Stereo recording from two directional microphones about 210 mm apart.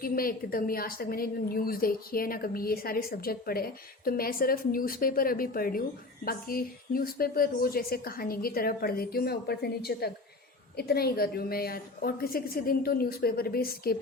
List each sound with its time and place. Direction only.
0.0 s a woman's voice: 45° left (ahead or behind)